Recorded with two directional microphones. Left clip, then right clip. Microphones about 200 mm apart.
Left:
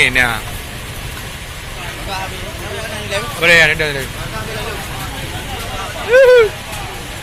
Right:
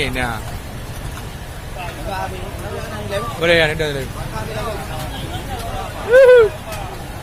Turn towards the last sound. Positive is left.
turn(degrees=-10)  # may be behind; listen again after turning